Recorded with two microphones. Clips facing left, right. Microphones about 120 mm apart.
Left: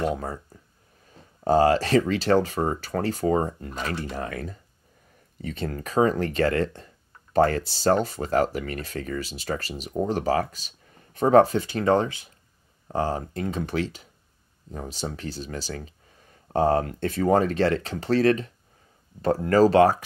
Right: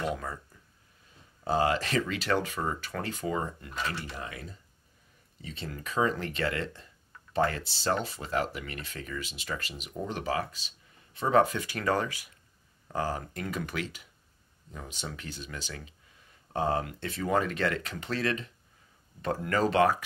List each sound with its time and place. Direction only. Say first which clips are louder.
0.0 s speech: left 6 dB; 30° left (ahead or behind)
1.1 s speech: left 8 dB; 45° left (ahead or behind)